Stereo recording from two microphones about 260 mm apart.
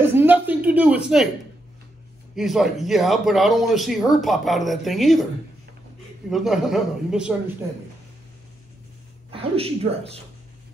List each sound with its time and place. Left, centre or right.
0.0 s a sound: centre
2.3 s a man's voice: centre
6.3 s a man's voice: centre
9.3 s speech: right